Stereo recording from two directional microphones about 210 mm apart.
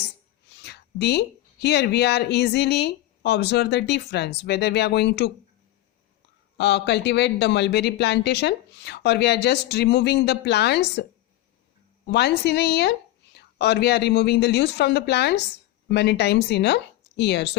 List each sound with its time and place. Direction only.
0.5 s speech: 55° left (ahead or behind)
6.6 s speech: 55° left (ahead or behind)
12.0 s speech: 50° left (ahead or behind)